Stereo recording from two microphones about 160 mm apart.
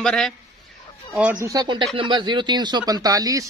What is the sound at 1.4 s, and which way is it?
A man's voice, 25° right (ahead or behind).